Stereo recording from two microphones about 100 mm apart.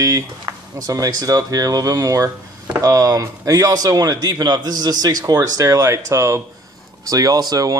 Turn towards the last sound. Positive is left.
turn(degrees=-40)  # may be behind; listen again after turning